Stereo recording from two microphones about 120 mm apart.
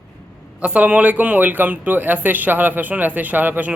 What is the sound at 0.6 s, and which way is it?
A man's voice, 10° right (ahead or behind).